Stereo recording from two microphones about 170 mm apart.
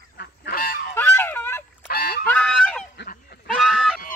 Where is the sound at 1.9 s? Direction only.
65° left (ahead or behind).